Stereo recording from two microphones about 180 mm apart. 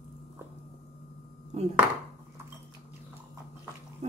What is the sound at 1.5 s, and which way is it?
Speech, 40° right (ahead or behind).